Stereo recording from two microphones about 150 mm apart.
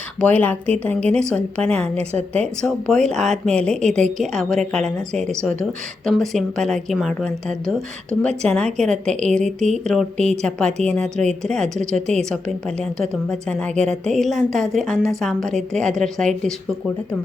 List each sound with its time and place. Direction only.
0.2 s a woman's voice: 10° left (ahead or behind)
8.4 s a woman's voice: 5° left (ahead or behind)
9.3 s speech: 55° right (ahead or behind)
9.8 s a woman's voice: centre (ahead or behind)
10.9 s speech: 50° right (ahead or behind)
11.3 s a woman's voice: 5° left (ahead or behind)